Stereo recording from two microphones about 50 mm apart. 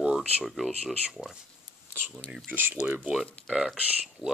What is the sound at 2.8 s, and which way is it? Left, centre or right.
Speech, right.